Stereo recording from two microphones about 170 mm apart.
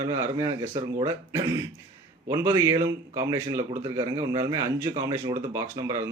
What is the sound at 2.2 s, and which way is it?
A man's voice, 15° right (ahead or behind).